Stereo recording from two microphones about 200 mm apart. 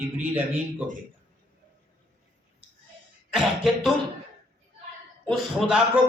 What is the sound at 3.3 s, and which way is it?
Beatboxing, centre (ahead or behind).